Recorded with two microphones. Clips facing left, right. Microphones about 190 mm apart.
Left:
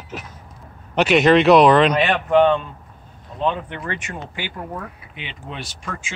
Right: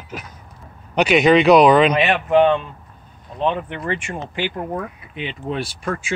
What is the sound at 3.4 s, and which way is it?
Speech, 20° right (ahead or behind).